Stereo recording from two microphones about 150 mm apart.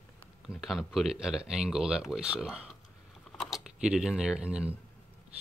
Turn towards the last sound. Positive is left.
turn(degrees=-5)  # may be behind; listen again after turning